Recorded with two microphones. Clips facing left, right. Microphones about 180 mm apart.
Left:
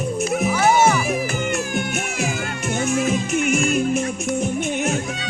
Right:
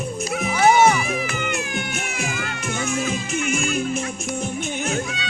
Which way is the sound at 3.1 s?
40° left (ahead or behind).